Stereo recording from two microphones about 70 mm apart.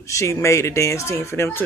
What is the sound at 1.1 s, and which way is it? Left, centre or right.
Speech, left.